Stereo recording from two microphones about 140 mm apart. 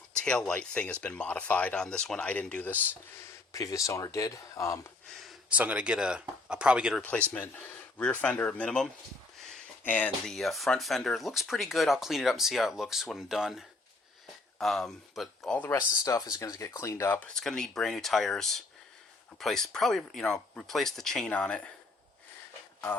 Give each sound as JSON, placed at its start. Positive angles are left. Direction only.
{"t": 0.2, "sound": "speech", "side_deg": 5}
{"t": 3.5, "sound": "speech", "side_deg": 25}
{"t": 5.0, "sound": "a sound", "side_deg": 0}
{"t": 5.5, "sound": "speech", "side_deg": -10}
{"t": 7.3, "sound": "speech", "side_deg": 15}
{"t": 9.5, "sound": "a sound", "side_deg": 10}
{"t": 10.2, "sound": "speech", "side_deg": 0}
{"t": 15.5, "sound": "speech", "side_deg": 10}
{"t": 16.0, "sound": "speech", "side_deg": 25}